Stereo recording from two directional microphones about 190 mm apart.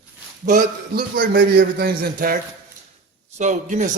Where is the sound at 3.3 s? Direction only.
40° right (ahead or behind).